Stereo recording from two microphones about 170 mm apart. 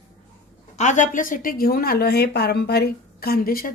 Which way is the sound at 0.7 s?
45° left (ahead or behind).